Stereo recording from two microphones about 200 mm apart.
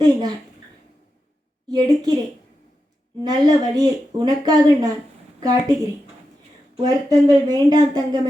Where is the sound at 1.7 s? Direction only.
20° right (ahead or behind).